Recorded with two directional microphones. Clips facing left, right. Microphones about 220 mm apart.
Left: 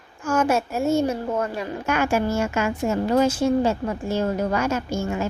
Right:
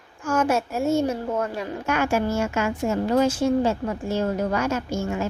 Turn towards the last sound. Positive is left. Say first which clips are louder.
# left 1 dB
turn(degrees=5)  # may be behind; listen again after turning